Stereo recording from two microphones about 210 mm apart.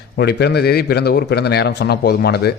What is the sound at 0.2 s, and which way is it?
A man's voice, 50° left (ahead or behind).